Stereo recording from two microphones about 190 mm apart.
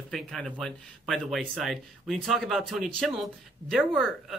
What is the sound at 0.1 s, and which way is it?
Speech, centre (ahead or behind).